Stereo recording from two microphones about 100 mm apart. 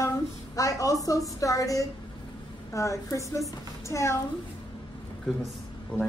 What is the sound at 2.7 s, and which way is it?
Speech, 30° left (ahead or behind).